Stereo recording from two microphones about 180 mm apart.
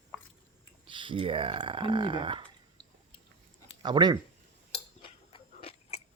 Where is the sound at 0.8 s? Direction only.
25° right (ahead or behind).